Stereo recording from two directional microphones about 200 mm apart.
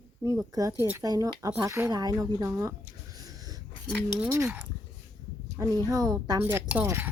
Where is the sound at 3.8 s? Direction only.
Centre (ahead or behind).